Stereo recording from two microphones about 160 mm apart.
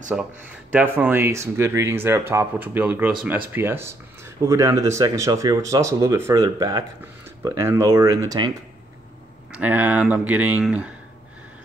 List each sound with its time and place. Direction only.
0.1 s speech: 5° right (ahead or behind)
9.5 s speech: 10° right (ahead or behind)